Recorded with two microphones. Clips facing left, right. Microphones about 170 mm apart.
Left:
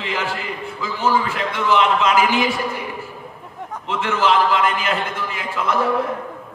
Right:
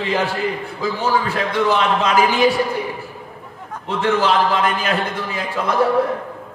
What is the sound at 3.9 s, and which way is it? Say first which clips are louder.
A man's voice: right 2 dB; 35° right (ahead or behind).